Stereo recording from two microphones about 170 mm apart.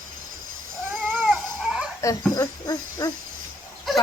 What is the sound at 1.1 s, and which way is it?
Dog, centre (ahead or behind).